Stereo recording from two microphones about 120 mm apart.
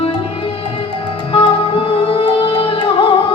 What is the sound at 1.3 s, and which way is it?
Music, 50° left (ahead or behind).